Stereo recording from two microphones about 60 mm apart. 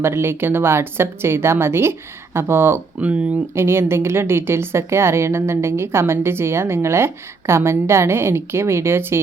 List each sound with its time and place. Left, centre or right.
0.0 s a woman's voice: right